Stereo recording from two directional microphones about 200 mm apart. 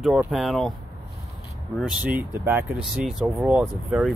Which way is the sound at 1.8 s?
5° right (ahead or behind).